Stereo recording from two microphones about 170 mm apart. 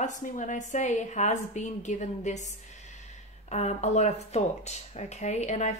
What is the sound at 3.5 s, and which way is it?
Speech, 40° left (ahead or behind).